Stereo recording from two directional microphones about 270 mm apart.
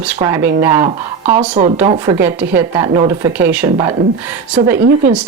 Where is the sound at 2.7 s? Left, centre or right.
Right.